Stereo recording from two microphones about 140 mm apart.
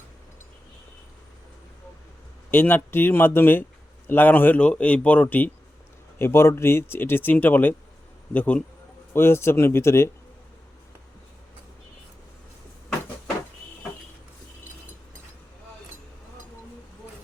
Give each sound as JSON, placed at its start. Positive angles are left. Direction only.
{"t": 2.5, "sound": "speech", "side_deg": 15}